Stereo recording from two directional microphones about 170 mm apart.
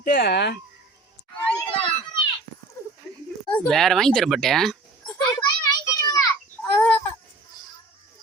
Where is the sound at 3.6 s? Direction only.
Centre (ahead or behind).